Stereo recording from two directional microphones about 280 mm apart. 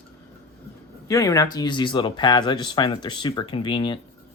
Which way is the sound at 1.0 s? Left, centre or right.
Centre.